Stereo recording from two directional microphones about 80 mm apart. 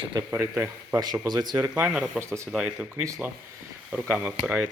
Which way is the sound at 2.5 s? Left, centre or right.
Centre.